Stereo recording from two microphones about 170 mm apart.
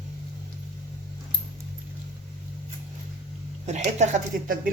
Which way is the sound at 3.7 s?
40° right (ahead or behind).